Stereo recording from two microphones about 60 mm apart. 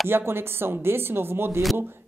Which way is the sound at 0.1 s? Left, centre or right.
Right.